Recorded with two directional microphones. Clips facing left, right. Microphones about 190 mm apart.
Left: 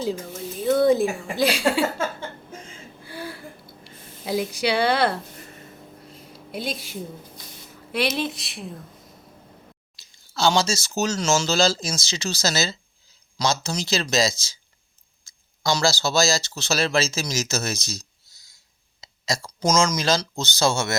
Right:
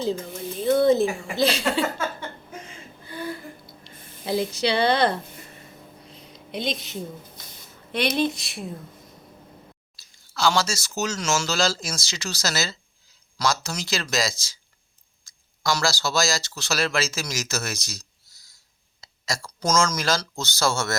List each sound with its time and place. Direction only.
0.8 s speech: 15° left (ahead or behind)
3.0 s a sound: 10° left (ahead or behind)
4.3 s speech: 10° left (ahead or behind)
6.1 s a sound: 5° left (ahead or behind)
7.9 s speech: centre (ahead or behind)
10.3 s speech: 25° left (ahead or behind)
19.0 s speech: 20° left (ahead or behind)